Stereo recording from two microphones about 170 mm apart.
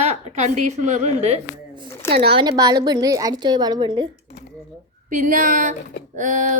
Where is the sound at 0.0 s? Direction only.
40° right (ahead or behind).